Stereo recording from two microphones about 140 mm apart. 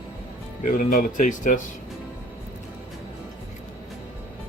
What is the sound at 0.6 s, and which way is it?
Speech, 70° left (ahead or behind).